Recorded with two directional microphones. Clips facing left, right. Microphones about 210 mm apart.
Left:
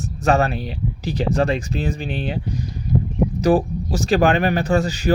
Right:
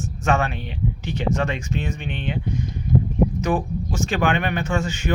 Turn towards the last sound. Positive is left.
turn(degrees=35)  # may be behind; listen again after turning